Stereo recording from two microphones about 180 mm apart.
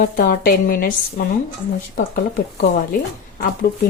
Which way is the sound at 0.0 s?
55° left (ahead or behind).